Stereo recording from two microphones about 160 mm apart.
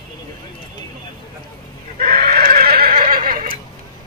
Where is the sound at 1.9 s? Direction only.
70° right (ahead or behind).